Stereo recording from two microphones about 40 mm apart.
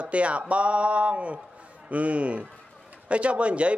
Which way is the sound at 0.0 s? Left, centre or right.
Right.